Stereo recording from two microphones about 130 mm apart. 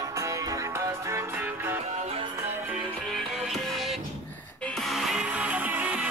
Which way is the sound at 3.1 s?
Centre (ahead or behind).